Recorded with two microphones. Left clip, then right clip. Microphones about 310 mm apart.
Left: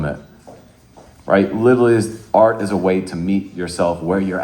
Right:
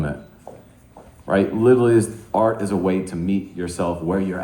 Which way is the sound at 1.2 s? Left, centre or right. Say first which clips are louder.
Left 3 dB; left.